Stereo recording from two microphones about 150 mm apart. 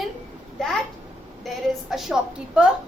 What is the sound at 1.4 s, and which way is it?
A woman's voice, centre (ahead or behind).